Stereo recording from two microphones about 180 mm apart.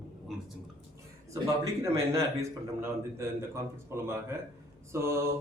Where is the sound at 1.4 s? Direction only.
15° right (ahead or behind).